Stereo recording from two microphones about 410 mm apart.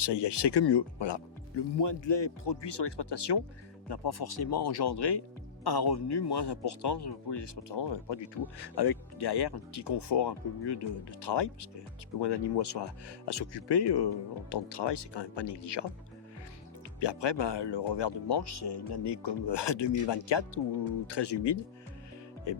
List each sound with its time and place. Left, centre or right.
0.0 s a man's voice: left
17.0 s a man's voice: left
21.1 s a man's voice: left
22.5 s speech: left